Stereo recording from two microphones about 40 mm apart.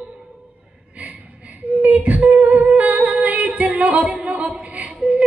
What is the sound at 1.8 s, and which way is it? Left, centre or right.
Beatboxing, right.